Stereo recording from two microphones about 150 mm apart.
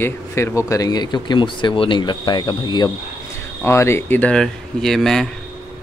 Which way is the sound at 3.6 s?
15° left (ahead or behind).